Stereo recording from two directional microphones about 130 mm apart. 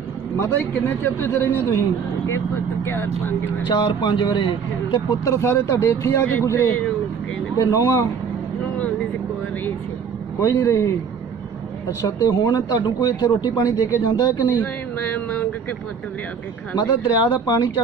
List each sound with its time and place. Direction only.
0.4 s a man's voice: 15° left (ahead or behind)
3.6 s a man's voice: 35° left (ahead or behind)
5.3 s a man's voice: 20° left (ahead or behind)
10.4 s a man's voice: 20° left (ahead or behind)
12.0 s a man's voice: 30° left (ahead or behind)
14.5 s a sound: 15° left (ahead or behind)
16.7 s a man's voice: 35° left (ahead or behind)